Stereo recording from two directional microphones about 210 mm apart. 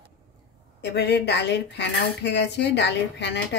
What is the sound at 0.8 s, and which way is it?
Dishes, 55° left (ahead or behind).